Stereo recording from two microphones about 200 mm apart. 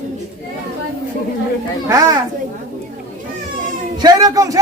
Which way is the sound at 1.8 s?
15° right (ahead or behind).